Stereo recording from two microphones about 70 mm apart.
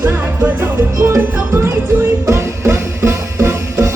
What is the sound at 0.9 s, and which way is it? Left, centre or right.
Music, right.